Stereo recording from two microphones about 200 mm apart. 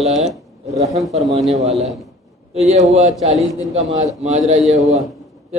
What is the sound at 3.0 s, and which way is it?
A man's voice, 35° right (ahead or behind).